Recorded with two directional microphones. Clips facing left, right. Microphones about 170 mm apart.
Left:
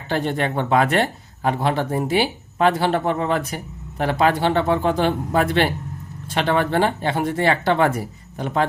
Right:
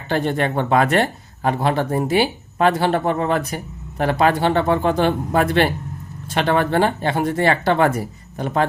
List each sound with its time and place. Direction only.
0.1 s speech: 45° right (ahead or behind)